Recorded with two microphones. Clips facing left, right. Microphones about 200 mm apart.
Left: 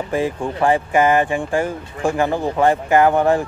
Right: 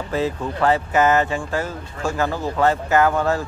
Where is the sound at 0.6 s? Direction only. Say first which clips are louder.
Left 2 dB; 15° left (ahead or behind).